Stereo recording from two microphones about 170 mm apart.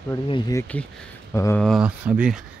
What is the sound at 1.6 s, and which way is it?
Speech, 5° right (ahead or behind).